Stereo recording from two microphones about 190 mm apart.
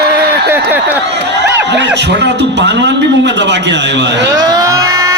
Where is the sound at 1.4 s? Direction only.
65° right (ahead or behind).